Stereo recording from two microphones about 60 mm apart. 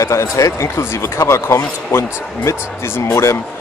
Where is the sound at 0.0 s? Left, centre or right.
Left.